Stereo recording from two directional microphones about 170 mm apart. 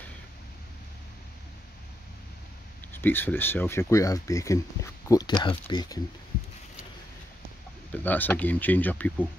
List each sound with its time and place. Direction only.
2.9 s speech: 10° left (ahead or behind)
7.9 s speech: 10° left (ahead or behind)